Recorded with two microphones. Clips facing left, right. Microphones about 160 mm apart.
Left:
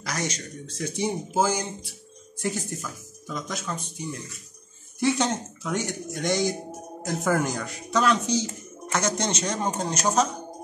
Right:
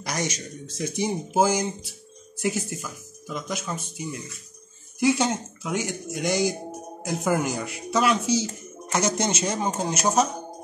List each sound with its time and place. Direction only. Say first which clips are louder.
0.0 s speech: right 1 dB; 15° right (ahead or behind)